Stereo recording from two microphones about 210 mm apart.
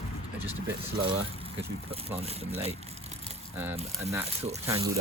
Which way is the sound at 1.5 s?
25° right (ahead or behind).